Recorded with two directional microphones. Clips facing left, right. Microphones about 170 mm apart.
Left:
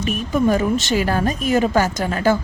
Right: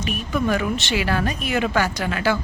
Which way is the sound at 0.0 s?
40° left (ahead or behind).